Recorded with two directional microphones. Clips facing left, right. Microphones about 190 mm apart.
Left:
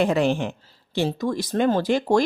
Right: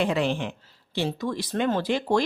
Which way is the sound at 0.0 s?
45° left (ahead or behind).